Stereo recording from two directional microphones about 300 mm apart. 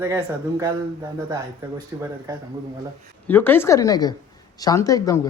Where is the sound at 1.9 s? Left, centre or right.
Centre.